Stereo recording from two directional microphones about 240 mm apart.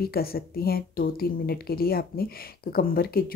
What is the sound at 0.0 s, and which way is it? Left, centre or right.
Speech, left.